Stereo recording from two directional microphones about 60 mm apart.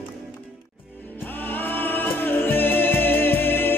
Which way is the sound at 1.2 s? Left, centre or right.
Left.